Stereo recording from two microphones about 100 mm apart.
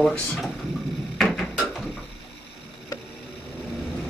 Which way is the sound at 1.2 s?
5° left (ahead or behind).